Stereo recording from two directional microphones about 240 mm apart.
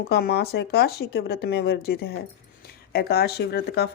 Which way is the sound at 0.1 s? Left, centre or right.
Left.